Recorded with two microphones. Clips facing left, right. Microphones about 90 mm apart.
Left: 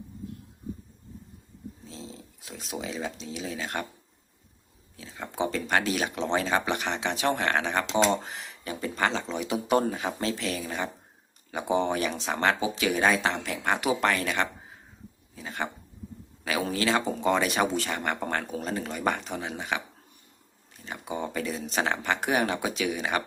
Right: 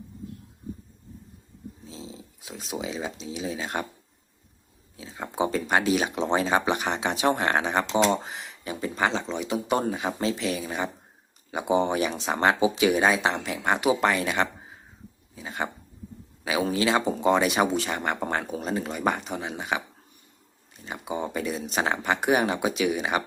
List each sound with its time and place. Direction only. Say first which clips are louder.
1.9 s speech: right 3 dB; 10° right (ahead or behind)
4.9 s speech: right 3 dB; 15° right (ahead or behind)
8.0 s speech: right 1 dB; 5° right (ahead or behind)
9.3 s speech: left 1 dB; centre (ahead or behind)
15.4 s a sound: right 2 dB; 5° right (ahead or behind)
16.4 s speech: right 3 dB; 10° right (ahead or behind)
20.8 s speech: right 2 dB; 10° right (ahead or behind)